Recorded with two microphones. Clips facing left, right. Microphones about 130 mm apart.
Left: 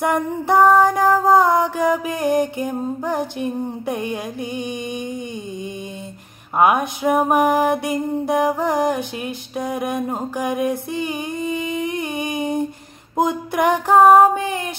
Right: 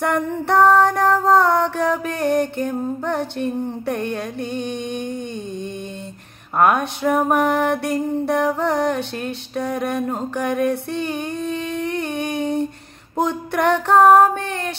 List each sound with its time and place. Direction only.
0.0 s music: 10° left (ahead or behind)
6.6 s music: 10° left (ahead or behind)